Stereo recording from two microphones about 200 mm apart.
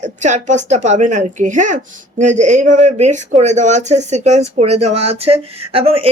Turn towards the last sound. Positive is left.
turn(degrees=-30)  # may be behind; listen again after turning